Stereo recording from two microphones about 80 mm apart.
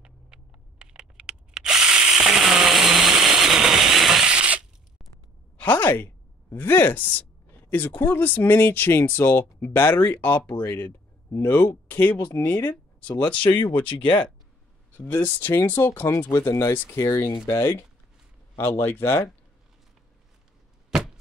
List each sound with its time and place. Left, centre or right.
0.0 s a sound: centre
5.6 s speech: centre
13.7 s speech: left
14.9 s speech: left